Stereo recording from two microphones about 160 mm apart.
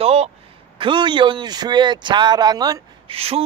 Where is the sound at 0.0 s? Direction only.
40° right (ahead or behind); by 2.8 s 25° right (ahead or behind).